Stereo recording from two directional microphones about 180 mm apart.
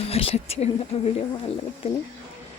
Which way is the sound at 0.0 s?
30° left (ahead or behind).